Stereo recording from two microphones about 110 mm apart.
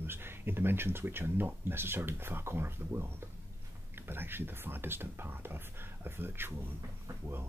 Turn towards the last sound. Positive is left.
turn(degrees=-20)  # may be behind; listen again after turning